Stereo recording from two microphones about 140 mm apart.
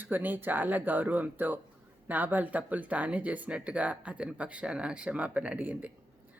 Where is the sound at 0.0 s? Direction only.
15° right (ahead or behind).